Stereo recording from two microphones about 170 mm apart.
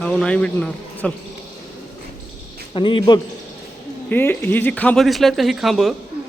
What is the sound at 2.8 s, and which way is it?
Speech, 30° left (ahead or behind).